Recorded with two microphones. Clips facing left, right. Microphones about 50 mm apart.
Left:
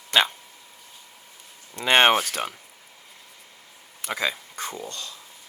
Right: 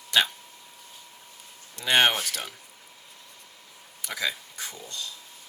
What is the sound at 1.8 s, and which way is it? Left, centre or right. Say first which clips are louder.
Speech: left 4 dB; left.